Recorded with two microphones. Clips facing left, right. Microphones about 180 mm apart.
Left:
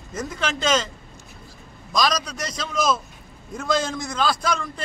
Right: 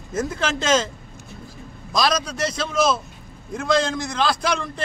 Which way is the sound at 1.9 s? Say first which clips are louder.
Right 1 dB; 5° right (ahead or behind).